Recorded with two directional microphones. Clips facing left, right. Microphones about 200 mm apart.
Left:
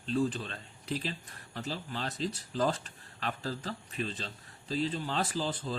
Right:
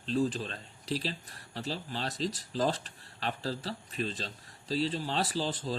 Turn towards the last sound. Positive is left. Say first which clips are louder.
# right 1 dB
turn(degrees=-35)  # may be behind; listen again after turning